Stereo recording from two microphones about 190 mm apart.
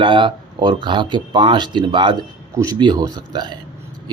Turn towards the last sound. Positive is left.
turn(degrees=-25)  # may be behind; listen again after turning